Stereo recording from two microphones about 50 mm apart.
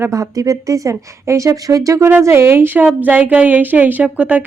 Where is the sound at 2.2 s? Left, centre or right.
Right.